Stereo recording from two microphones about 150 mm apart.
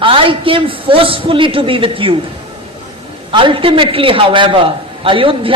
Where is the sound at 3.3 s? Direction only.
35° right (ahead or behind).